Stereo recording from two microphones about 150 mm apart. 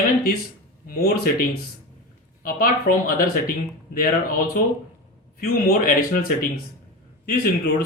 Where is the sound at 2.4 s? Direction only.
70° left (ahead or behind).